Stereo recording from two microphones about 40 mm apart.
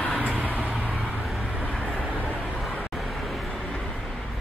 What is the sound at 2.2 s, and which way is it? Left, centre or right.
Vehicle, left.